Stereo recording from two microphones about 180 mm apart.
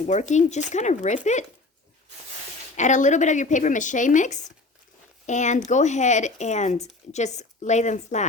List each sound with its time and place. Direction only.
0.1 s speech: 40° left (ahead or behind)
2.7 s speech: 40° left (ahead or behind)